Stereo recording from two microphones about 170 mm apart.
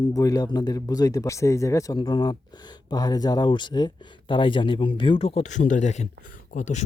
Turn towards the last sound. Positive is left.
turn(degrees=45)  # may be behind; listen again after turning